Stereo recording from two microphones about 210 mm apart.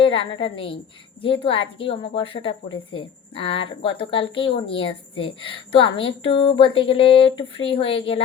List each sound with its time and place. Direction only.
0.0 s speech: 25° left (ahead or behind)